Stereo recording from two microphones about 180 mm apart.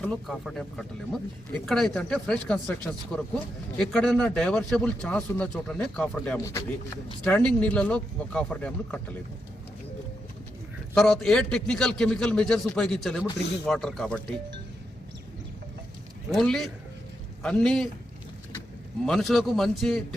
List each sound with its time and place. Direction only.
0.0 s a man's voice: 5° left (ahead or behind)
6.4 s speech: 15° left (ahead or behind)
10.9 s a man's voice: centre (ahead or behind)
16.3 s a man's voice: centre (ahead or behind)
19.0 s a man's voice: centre (ahead or behind)